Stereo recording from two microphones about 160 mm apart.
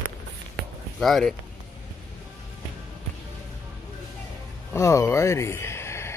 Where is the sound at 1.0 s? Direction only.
Centre (ahead or behind).